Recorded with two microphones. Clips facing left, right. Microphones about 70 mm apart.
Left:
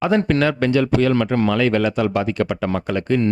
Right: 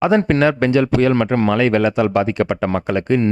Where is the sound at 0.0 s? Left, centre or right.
Right.